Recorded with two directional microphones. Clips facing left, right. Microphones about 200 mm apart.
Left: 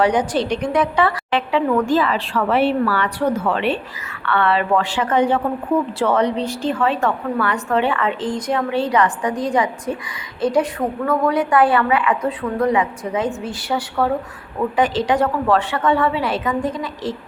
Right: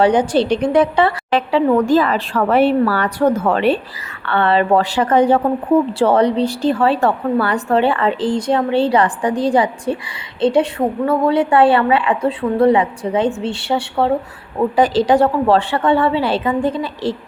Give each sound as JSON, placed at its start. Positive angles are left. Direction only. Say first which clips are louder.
{"t": 0.0, "sound": "a woman's voice", "louder": "right 4 dB", "side_deg": -30}
{"t": 4.3, "sound": "a woman's voice", "louder": "right 3 dB", "side_deg": -30}